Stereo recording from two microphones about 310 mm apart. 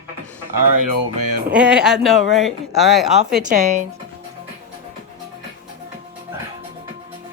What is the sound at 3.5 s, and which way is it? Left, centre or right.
Speech, right.